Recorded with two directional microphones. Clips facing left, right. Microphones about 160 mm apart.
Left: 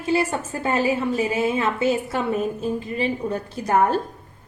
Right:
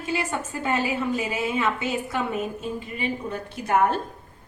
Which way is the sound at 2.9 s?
40° left (ahead or behind).